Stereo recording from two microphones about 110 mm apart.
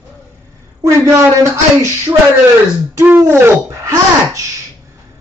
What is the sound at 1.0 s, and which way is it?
Speech, 25° right (ahead or behind).